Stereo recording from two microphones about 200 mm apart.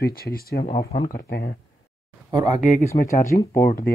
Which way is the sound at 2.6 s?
35° left (ahead or behind).